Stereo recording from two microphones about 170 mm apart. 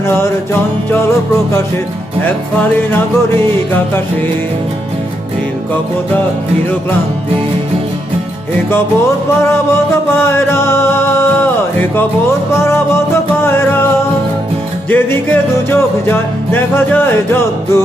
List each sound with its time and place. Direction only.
2.9 s music: 10° left (ahead or behind)
9.4 s music: 15° left (ahead or behind)